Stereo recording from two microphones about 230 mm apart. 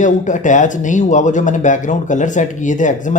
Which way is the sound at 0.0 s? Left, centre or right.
Left.